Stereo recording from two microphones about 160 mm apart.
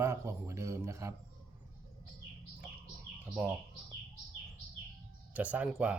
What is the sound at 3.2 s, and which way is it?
Speech, 5° right (ahead or behind).